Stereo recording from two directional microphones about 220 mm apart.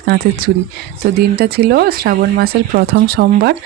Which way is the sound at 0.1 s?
40° right (ahead or behind).